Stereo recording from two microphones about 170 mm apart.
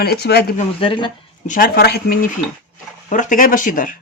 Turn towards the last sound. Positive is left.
turn(degrees=50)  # may be behind; listen again after turning